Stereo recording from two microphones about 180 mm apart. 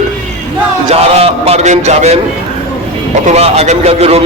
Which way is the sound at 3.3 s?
35° right (ahead or behind).